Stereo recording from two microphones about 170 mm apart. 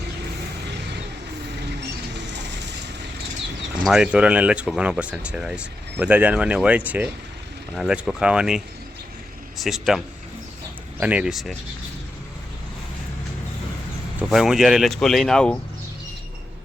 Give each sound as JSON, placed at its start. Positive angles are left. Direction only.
{"t": 2.2, "sound": "vehicle", "side_deg": -90}
{"t": 3.8, "sound": "speech", "side_deg": -5}
{"t": 11.0, "sound": "speech", "side_deg": -5}
{"t": 14.3, "sound": "speech", "side_deg": 0}